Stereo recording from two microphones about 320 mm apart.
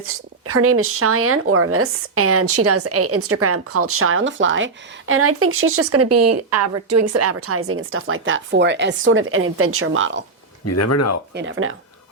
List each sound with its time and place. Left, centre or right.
0.0 s speech: right
10.7 s speech: left
11.3 s speech: right